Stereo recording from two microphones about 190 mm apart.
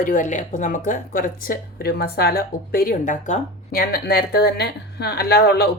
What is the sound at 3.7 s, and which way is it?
Speech, 55° left (ahead or behind).